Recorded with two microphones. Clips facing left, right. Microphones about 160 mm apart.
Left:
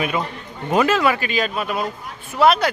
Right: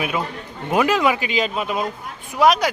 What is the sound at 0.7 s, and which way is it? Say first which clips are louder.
Speech: left 1 dB; 10° right (ahead or behind).